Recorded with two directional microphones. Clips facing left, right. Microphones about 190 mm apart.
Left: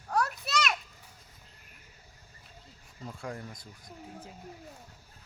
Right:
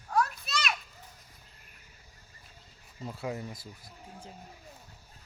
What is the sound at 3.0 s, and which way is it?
Speech, 5° right (ahead or behind).